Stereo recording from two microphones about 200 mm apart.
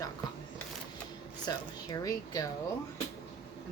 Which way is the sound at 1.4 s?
20° left (ahead or behind).